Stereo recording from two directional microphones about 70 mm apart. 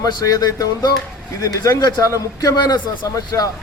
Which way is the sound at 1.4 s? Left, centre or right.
Left.